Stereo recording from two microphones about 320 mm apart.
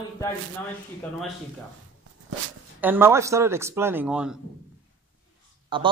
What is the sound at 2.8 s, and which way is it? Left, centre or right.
Speech, centre.